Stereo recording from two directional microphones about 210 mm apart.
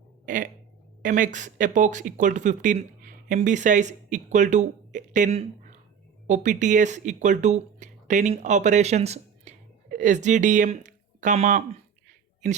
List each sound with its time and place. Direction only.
1.0 s speech: 40° right (ahead or behind)